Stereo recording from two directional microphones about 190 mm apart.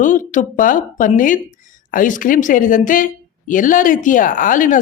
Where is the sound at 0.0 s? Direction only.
45° left (ahead or behind).